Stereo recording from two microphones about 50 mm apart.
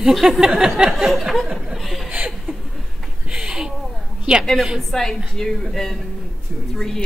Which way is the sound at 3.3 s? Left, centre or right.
Centre.